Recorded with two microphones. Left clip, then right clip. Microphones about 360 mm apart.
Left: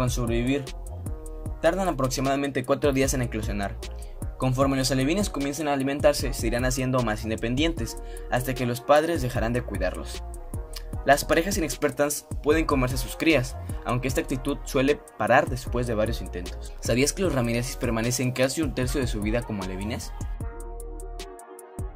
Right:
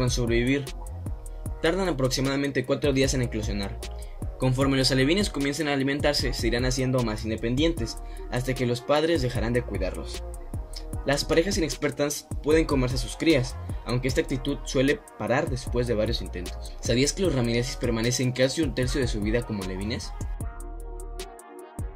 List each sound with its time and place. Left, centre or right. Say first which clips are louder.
0.0 s speech: right 2 dB; centre